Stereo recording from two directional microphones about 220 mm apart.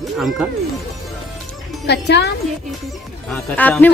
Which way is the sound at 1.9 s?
50° left (ahead or behind).